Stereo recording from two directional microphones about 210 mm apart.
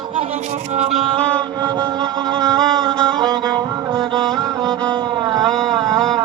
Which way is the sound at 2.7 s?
20° right (ahead or behind).